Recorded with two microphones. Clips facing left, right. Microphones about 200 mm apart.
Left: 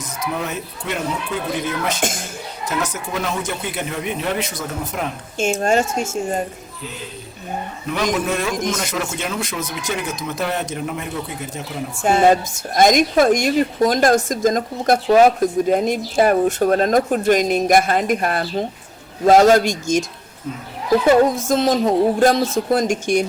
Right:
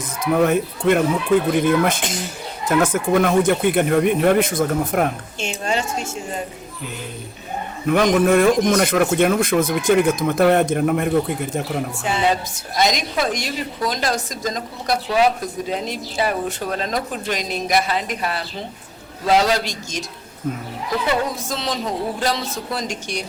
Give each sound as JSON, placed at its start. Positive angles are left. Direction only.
{"t": 0.2, "sound": "a man's voice", "side_deg": -55}
{"t": 2.0, "sound": "a woman's voice", "side_deg": 50}
{"t": 2.6, "sound": "a man's voice", "side_deg": -55}
{"t": 5.4, "sound": "a woman's voice", "side_deg": 45}
{"t": 7.9, "sound": "a man's voice", "side_deg": -50}
{"t": 11.9, "sound": "a woman's voice", "side_deg": 50}